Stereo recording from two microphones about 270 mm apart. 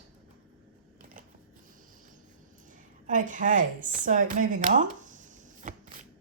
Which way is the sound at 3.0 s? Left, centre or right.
Right.